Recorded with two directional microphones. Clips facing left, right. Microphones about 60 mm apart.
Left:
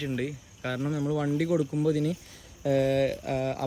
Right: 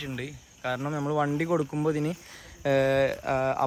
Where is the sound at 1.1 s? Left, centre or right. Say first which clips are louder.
Right 4 dB; right.